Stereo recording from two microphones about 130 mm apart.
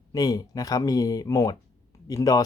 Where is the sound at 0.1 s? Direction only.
30° left (ahead or behind).